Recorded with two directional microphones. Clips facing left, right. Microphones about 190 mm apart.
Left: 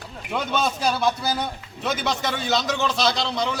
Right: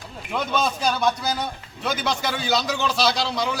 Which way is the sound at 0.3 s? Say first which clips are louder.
Even; centre (ahead or behind).